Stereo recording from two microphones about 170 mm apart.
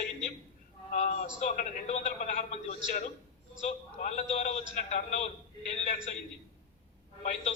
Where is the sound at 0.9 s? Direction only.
45° left (ahead or behind).